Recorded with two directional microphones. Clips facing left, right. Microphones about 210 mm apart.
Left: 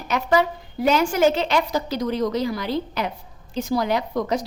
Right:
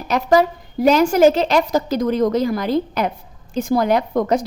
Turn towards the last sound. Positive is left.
turn(degrees=-50)  # may be behind; listen again after turning